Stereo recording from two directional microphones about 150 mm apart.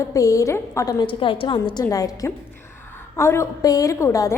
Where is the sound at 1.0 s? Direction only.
35° left (ahead or behind).